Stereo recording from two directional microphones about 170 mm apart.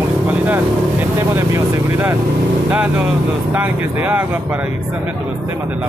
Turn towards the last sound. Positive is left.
turn(degrees=-10)  # may be behind; listen again after turning